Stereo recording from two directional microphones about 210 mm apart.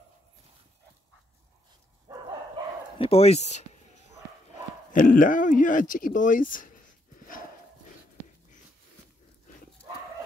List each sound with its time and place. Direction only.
2.1 s bow-wow: 20° right (ahead or behind)
3.0 s speech: 30° left (ahead or behind)
4.9 s speech: 40° left (ahead or behind)